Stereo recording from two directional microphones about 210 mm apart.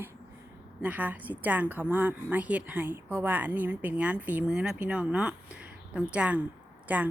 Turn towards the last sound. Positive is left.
turn(degrees=-5)  # may be behind; listen again after turning